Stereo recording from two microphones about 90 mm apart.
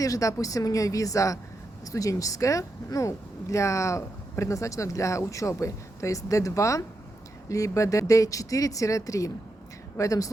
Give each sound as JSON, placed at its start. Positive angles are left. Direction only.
{"t": 0.0, "sound": "speech", "side_deg": 40}